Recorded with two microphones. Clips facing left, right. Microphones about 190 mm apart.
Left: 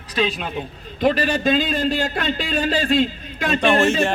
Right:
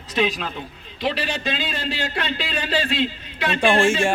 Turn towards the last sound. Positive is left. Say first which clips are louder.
# left 1 dB
turn(degrees=-10)  # may be behind; listen again after turning